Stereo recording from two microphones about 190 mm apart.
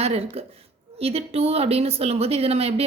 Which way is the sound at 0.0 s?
30° right (ahead or behind).